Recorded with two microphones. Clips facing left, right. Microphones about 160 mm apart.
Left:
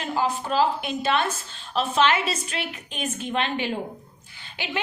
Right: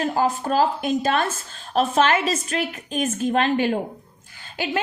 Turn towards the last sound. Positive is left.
turn(degrees=-40)  # may be behind; listen again after turning